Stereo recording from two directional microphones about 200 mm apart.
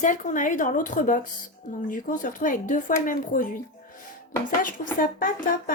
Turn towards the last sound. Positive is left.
turn(degrees=45)  # may be behind; listen again after turning